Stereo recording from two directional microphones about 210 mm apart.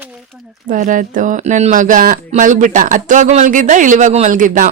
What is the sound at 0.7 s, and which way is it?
Speech, 40° right (ahead or behind).